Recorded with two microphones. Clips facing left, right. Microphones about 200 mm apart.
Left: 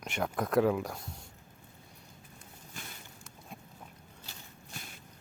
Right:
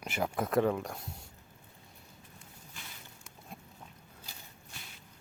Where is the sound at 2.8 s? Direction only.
45° left (ahead or behind).